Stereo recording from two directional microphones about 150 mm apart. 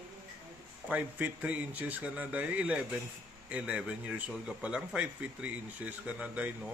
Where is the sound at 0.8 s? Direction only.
10° right (ahead or behind).